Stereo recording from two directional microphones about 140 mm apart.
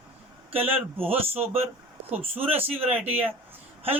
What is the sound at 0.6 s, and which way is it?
Speech, 45° right (ahead or behind).